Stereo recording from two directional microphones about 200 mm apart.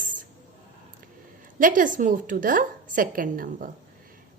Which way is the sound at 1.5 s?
40° right (ahead or behind).